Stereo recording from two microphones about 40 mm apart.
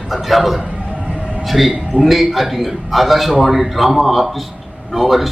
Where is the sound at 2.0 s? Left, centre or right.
Centre.